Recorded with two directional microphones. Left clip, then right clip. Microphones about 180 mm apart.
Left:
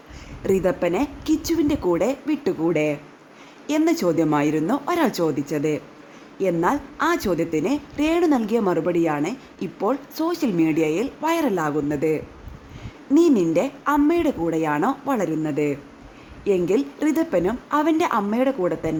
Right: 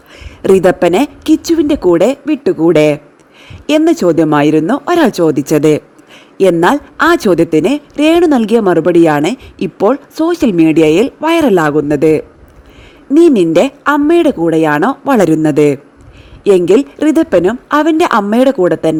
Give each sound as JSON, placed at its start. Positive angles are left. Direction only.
{"t": 0.4, "sound": "a woman's voice", "side_deg": -55}